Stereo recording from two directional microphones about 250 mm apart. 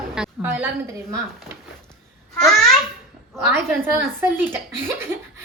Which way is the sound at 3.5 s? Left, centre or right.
Centre.